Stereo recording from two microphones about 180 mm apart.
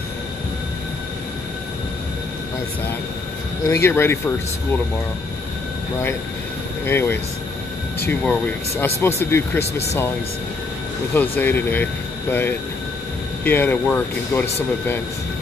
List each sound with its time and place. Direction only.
3.6 s speech: 15° left (ahead or behind)
6.9 s speech: 15° left (ahead or behind)
11.1 s speech: 10° left (ahead or behind)